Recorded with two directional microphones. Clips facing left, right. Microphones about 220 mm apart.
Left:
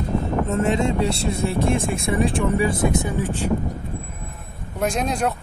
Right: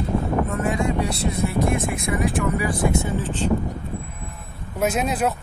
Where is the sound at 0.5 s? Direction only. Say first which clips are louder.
Left 3 dB; 25° left (ahead or behind).